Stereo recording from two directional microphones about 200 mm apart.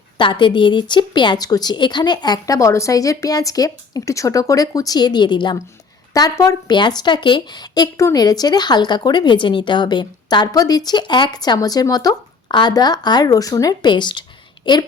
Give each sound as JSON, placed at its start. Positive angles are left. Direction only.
{"t": 0.2, "sound": "speech", "side_deg": 25}